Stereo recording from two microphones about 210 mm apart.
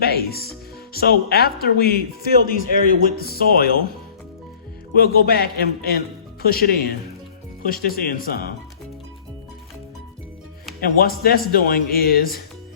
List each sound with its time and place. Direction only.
0.0 s speech: 45° left (ahead or behind)
4.9 s speech: 45° left (ahead or behind)
10.8 s speech: 45° left (ahead or behind)